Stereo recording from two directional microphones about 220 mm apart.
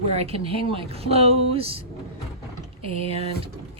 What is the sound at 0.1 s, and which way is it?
Speech, 25° right (ahead or behind).